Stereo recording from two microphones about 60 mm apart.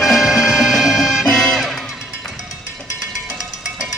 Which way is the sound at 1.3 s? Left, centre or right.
Centre.